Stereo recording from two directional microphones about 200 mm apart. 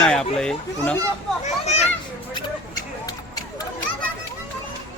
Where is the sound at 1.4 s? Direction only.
35° left (ahead or behind).